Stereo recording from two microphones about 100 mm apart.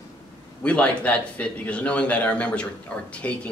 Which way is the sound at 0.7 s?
15° left (ahead or behind).